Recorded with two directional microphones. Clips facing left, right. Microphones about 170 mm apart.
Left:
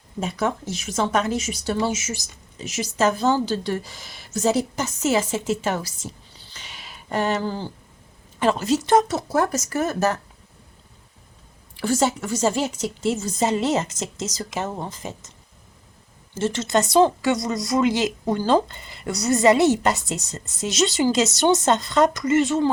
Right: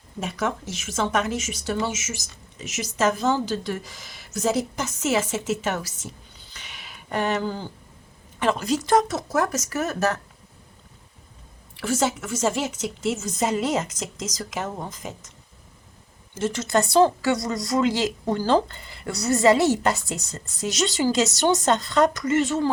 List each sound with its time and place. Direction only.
0.3 s speech: 35° left (ahead or behind)
6.5 s a sound: 30° left (ahead or behind)
8.4 s speech: 25° left (ahead or behind)
11.8 s speech: 35° left (ahead or behind)
16.3 s speech: 25° left (ahead or behind)